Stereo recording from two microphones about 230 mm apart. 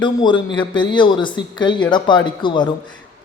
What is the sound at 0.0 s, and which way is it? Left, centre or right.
Speech, centre.